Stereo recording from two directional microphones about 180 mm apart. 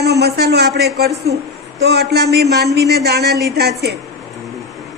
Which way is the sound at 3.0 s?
65° right (ahead or behind).